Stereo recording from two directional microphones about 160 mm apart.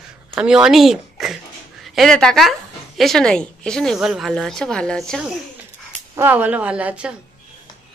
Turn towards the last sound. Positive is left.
turn(degrees=-5)  # may be behind; listen again after turning